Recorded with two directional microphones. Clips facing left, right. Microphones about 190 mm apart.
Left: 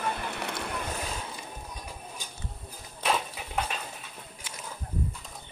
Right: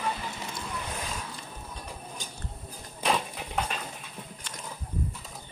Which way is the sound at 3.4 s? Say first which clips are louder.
Right 1 dB; 5° left (ahead or behind).